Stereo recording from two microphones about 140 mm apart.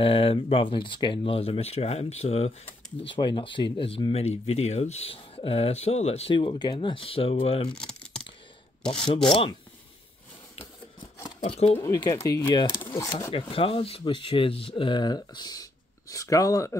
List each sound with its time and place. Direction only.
0.0 s speech: 40° left (ahead or behind)
3.0 s speech: 35° left (ahead or behind)
6.3 s speech: 35° left (ahead or behind)
7.7 s computer keyboard: 5° left (ahead or behind)
11.4 s speech: 45° left (ahead or behind)
11.8 s speech: 25° left (ahead or behind)
12.5 s speech: 35° left (ahead or behind)